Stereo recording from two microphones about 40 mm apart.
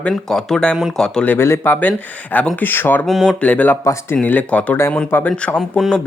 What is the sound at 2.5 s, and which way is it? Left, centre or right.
Speech, left.